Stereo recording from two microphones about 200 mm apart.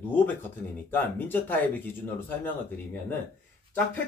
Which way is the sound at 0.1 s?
10° left (ahead or behind).